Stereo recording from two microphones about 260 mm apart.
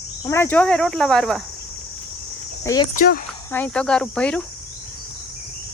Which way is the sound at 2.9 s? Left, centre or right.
Left.